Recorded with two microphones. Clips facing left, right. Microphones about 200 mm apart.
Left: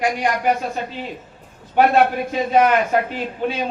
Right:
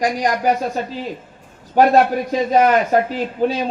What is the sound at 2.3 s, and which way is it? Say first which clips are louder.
A man's voice: right 3 dB; 40° right (ahead or behind).